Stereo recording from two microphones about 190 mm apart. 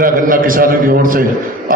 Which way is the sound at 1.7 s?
45° right (ahead or behind).